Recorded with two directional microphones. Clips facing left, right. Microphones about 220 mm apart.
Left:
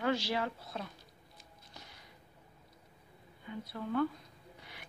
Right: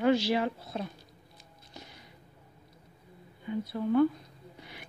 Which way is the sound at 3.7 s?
20° right (ahead or behind).